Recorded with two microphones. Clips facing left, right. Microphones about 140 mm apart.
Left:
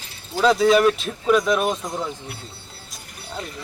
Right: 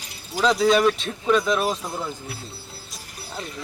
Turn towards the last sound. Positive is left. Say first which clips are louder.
# left 2 dB
turn(degrees=-5)  # may be behind; listen again after turning